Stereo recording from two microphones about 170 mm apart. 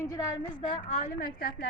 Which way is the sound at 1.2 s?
60° left (ahead or behind).